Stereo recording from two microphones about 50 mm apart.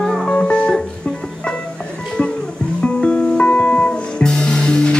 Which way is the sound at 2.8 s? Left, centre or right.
Left.